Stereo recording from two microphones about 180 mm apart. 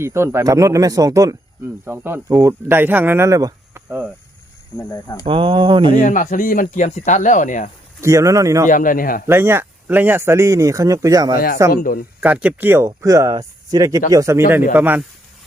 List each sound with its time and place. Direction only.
0.0 s speech: 15° right (ahead or behind)
4.9 s speech: 20° left (ahead or behind)
5.2 s speech: 30° right (ahead or behind)
6.0 s speech: 45° left (ahead or behind)
8.0 s speech: 15° right (ahead or behind)
8.6 s speech: 45° left (ahead or behind)
9.2 s speech: 15° right (ahead or behind)
11.3 s speech: 55° left (ahead or behind)
12.2 s speech: 10° right (ahead or behind)